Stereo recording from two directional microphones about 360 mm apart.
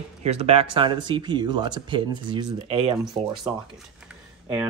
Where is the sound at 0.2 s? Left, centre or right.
Centre.